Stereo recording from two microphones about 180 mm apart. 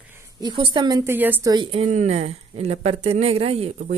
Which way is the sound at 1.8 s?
40° right (ahead or behind).